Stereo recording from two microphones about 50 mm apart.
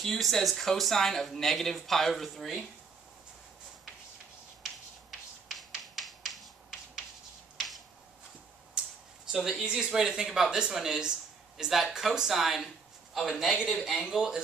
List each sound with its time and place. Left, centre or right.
0.0 s speech: centre
5.5 s finger snapping: centre
9.3 s a man's voice: centre
14.1 s speech: centre